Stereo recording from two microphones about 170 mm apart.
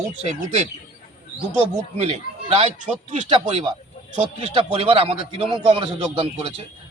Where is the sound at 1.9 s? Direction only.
40° right (ahead or behind).